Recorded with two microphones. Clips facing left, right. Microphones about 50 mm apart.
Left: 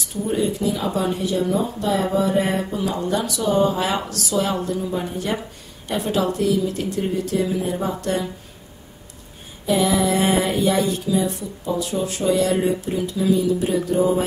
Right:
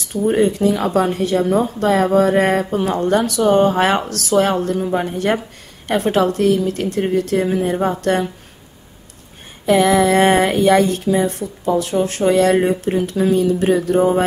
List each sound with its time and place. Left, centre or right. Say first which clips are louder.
0.3 s speech: right 6 dB; right
9.7 s speech: right 6 dB; right